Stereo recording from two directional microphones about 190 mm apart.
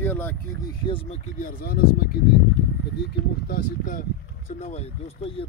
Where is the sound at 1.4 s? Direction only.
50° left (ahead or behind).